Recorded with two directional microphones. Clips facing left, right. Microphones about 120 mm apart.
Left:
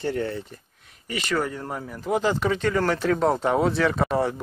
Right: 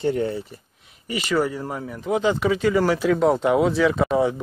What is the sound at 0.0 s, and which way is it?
Speech, 20° right (ahead or behind).